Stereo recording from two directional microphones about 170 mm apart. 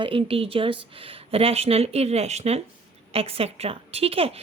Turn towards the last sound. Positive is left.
turn(degrees=-35)  # may be behind; listen again after turning